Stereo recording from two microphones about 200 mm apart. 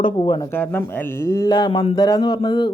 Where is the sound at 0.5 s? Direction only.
10° left (ahead or behind).